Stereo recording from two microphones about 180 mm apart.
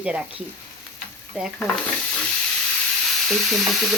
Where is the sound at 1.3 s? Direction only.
5° right (ahead or behind).